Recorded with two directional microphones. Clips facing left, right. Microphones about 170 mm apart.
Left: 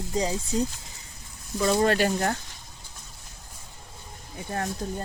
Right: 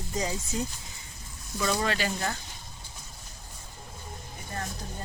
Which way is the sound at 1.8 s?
55° left (ahead or behind).